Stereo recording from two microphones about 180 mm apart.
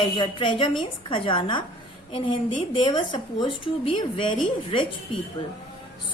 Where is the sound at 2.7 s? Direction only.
25° left (ahead or behind).